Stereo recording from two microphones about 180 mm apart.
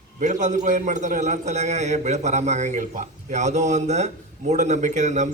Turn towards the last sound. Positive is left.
turn(degrees=-40)  # may be behind; listen again after turning